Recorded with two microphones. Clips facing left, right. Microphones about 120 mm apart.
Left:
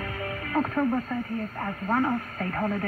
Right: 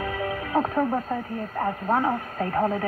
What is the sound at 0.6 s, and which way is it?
Speech, 30° right (ahead or behind).